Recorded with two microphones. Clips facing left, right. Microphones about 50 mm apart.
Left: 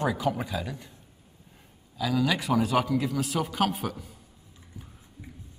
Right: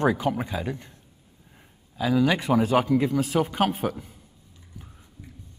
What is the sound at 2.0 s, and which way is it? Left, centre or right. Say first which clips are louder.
Speech: right 4 dB; right.